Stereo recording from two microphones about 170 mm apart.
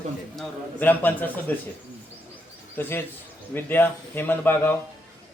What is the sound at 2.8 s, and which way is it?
A man's voice, 10° left (ahead or behind).